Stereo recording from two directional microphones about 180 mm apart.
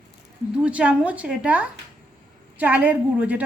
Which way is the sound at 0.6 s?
5° right (ahead or behind).